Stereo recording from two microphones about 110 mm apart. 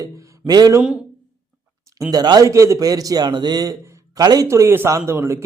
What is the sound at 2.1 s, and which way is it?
A man's voice, 40° right (ahead or behind).